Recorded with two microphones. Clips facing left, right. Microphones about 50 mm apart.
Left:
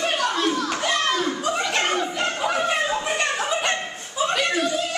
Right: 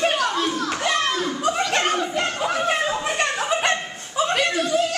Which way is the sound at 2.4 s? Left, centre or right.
Centre.